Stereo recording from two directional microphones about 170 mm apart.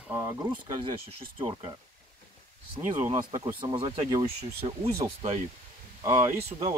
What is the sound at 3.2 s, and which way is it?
Speech, 25° right (ahead or behind).